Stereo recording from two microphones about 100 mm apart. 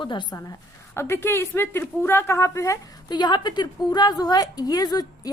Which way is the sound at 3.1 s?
45° left (ahead or behind).